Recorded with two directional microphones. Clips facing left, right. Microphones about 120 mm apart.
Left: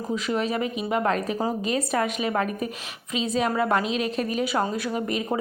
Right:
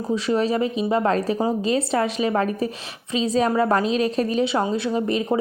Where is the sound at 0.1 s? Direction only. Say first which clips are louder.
Right 5 dB; 30° right (ahead or behind).